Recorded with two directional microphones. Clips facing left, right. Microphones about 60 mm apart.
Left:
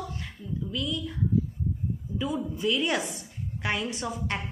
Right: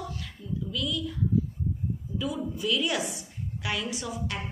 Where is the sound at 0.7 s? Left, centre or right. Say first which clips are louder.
Even; left.